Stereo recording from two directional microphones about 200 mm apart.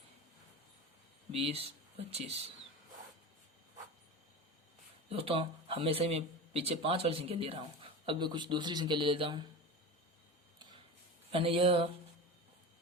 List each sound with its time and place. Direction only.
1.3 s speech: 30° right (ahead or behind)
5.0 s speech: 30° right (ahead or behind)
11.3 s speech: 30° right (ahead or behind)